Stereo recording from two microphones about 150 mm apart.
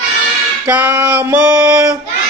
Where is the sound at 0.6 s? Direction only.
10° right (ahead or behind).